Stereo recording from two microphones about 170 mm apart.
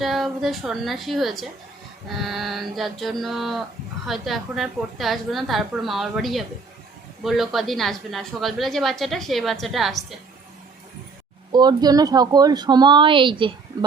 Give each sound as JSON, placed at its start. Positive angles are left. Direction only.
{"t": 0.0, "sound": "a woman's voice", "side_deg": 0}
{"t": 11.5, "sound": "speech", "side_deg": -25}